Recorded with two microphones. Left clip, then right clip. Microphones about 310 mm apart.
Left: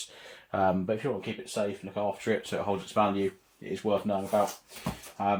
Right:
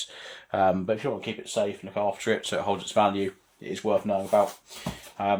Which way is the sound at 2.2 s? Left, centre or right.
Right.